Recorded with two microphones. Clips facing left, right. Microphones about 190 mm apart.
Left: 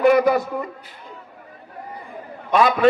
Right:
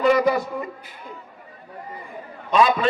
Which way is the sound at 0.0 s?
60° left (ahead or behind).